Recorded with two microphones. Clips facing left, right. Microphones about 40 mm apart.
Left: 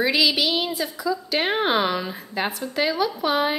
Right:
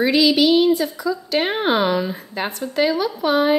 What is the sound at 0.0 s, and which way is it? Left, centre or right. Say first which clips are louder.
A woman's voice: right 5 dB; centre.